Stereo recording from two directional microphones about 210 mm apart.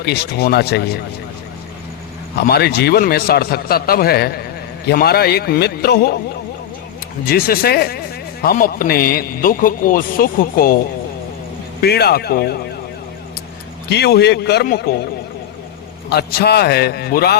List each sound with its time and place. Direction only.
0.0 s speech: 50° left (ahead or behind)
2.4 s speech: 50° left (ahead or behind)
7.3 s speech: 45° left (ahead or behind)
11.8 s speech: 50° left (ahead or behind)
13.9 s speech: 50° left (ahead or behind)
16.0 s speech: 50° left (ahead or behind)